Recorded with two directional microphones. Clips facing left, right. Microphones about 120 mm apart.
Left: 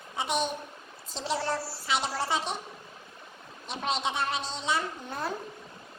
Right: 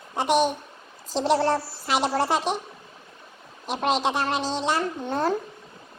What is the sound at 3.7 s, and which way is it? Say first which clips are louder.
Speech: right 7 dB; 90° right.